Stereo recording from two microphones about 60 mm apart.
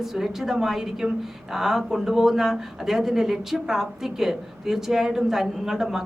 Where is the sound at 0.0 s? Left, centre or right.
Centre.